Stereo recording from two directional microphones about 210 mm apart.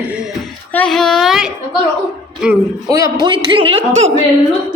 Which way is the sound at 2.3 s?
5° right (ahead or behind).